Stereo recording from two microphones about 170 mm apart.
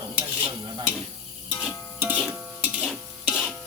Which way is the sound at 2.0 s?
10° right (ahead or behind).